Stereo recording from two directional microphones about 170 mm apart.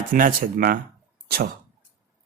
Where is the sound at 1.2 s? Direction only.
65° right (ahead or behind).